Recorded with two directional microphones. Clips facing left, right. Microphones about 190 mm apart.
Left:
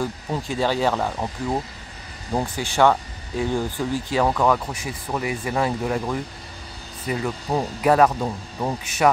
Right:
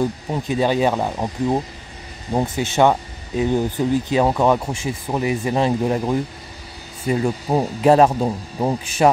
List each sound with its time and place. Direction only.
0.0 s speech: 20° right (ahead or behind)